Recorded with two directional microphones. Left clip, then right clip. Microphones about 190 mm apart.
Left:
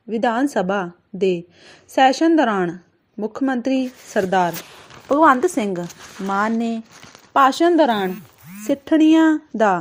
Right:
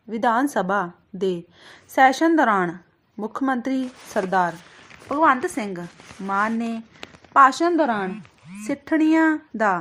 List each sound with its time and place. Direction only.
0.2 s a woman's voice: 15° left (ahead or behind)